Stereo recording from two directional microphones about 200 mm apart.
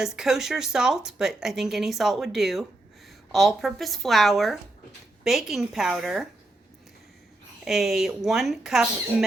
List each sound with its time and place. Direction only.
0.0 s speech: centre (ahead or behind)
7.6 s speech: centre (ahead or behind)